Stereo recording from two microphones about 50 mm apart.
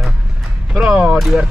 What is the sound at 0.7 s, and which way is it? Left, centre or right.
Speech, centre.